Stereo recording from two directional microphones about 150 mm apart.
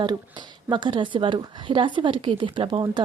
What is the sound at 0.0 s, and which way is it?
Speech, 30° right (ahead or behind).